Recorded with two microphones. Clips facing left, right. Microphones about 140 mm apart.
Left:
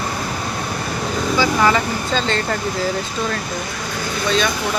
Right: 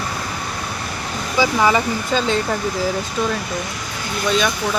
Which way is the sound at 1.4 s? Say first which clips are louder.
Right 1 dB; 15° right (ahead or behind).